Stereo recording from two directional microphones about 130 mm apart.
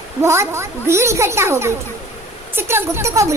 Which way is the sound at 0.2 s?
20° right (ahead or behind).